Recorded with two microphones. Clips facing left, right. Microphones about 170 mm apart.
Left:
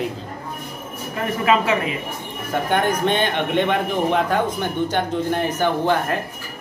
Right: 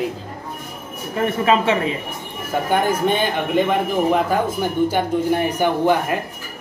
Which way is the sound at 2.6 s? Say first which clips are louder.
Right 1 dB; 5° right (ahead or behind).